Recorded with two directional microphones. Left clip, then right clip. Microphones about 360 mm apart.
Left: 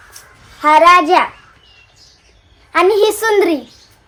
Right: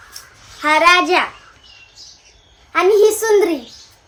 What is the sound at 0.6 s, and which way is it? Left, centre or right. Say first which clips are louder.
Speech: left 4 dB; centre.